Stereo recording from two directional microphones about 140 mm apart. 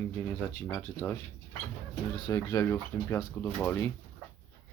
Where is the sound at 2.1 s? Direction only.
30° left (ahead or behind); by 3.9 s 15° left (ahead or behind).